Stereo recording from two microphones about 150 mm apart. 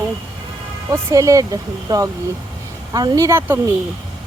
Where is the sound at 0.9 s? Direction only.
20° right (ahead or behind).